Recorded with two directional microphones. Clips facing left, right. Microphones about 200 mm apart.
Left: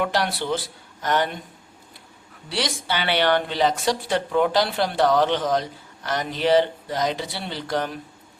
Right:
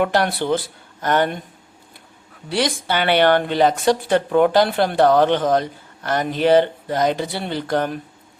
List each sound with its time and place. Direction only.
0.0 s speech: 50° right (ahead or behind)
2.5 s speech: 50° right (ahead or behind)